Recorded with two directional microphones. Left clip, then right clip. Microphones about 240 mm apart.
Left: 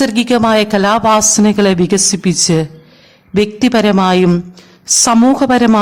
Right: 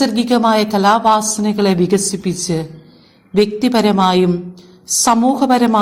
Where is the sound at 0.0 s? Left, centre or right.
Left.